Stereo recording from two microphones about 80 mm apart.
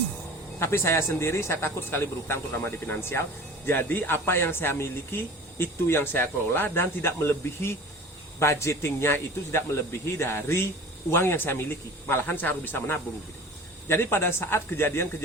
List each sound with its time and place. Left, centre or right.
0.6 s speech: left